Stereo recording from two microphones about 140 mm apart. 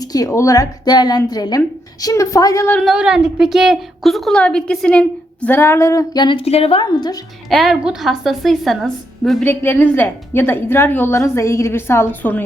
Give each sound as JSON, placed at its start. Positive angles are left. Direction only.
{"t": 0.0, "sound": "a woman's voice", "side_deg": 25}
{"t": 2.8, "sound": "a woman's voice", "side_deg": -5}
{"t": 6.2, "sound": "a woman's voice", "side_deg": 40}
{"t": 7.5, "sound": "a woman's voice", "side_deg": 0}
{"t": 9.4, "sound": "a woman's voice", "side_deg": 15}